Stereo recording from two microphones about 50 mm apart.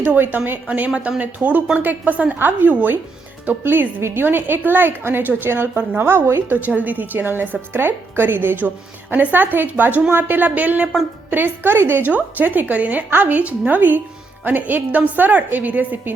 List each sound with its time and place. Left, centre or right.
0.0 s a woman's voice: right
6.7 s a woman's voice: right
11.3 s a woman's voice: right
12.0 s a woman's voice: right